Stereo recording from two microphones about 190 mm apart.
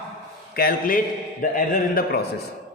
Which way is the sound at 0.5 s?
50° left (ahead or behind).